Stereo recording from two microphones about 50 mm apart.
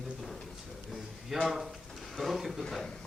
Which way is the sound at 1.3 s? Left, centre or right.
Centre.